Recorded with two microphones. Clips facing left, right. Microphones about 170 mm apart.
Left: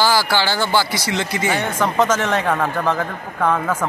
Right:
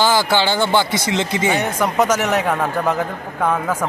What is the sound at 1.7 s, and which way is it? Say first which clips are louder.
Speech: right 1 dB; 10° right (ahead or behind).